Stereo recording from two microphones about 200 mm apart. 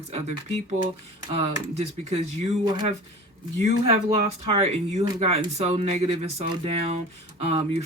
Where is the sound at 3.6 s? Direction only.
30° right (ahead or behind).